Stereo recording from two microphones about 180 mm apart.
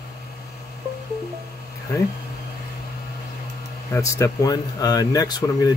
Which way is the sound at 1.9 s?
15° left (ahead or behind).